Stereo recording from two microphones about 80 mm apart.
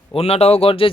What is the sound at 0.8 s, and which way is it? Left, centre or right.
Speech, left.